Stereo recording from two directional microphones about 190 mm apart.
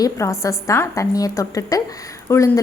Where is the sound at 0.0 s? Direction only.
15° left (ahead or behind).